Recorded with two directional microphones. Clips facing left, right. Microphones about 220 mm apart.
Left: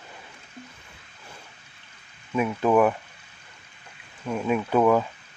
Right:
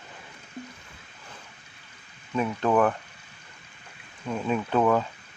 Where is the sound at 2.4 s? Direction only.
10° left (ahead or behind).